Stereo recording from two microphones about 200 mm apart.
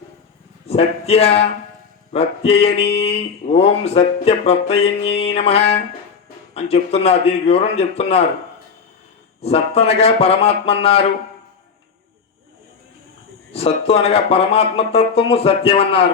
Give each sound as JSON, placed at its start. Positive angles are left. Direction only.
{"t": 0.7, "sound": "speech", "side_deg": 30}
{"t": 9.4, "sound": "speech", "side_deg": 30}
{"t": 13.5, "sound": "speech", "side_deg": 30}